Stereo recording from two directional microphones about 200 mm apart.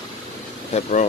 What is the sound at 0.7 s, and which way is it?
Speech, 35° left (ahead or behind).